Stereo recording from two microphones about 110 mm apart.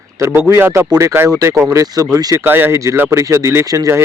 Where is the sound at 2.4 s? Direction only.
20° right (ahead or behind).